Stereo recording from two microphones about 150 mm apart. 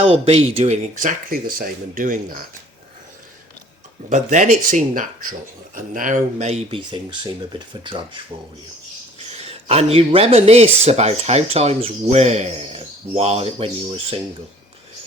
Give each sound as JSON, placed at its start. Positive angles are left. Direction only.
{"t": 0.1, "sound": "speech", "side_deg": -40}
{"t": 1.0, "sound": "speech", "side_deg": -75}
{"t": 4.1, "sound": "speech", "side_deg": -60}